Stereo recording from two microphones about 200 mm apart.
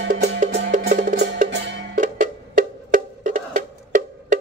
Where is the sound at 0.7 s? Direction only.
40° right (ahead or behind).